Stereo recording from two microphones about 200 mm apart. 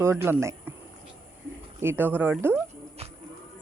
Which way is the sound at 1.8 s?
10° right (ahead or behind).